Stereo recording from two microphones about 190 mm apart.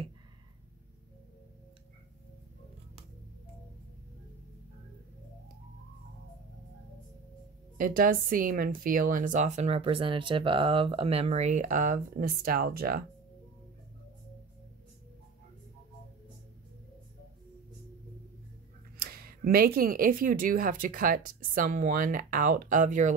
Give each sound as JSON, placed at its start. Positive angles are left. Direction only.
{"t": 7.7, "sound": "speech", "side_deg": -50}
{"t": 18.9, "sound": "speech", "side_deg": -50}